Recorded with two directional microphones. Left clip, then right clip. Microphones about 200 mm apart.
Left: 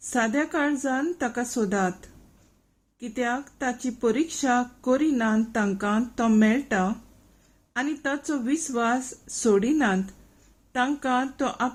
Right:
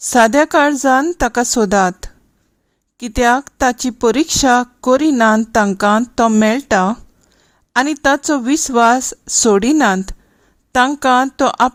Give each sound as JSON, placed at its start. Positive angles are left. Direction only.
{"t": 0.1, "sound": "speech", "side_deg": -55}
{"t": 3.0, "sound": "speech", "side_deg": -55}